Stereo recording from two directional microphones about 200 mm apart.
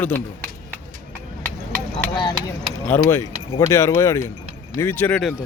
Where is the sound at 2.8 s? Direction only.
10° left (ahead or behind).